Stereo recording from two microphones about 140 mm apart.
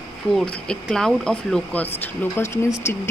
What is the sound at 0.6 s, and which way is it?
Speech, 5° left (ahead or behind).